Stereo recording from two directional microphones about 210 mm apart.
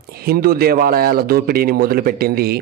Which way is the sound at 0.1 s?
45° right (ahead or behind).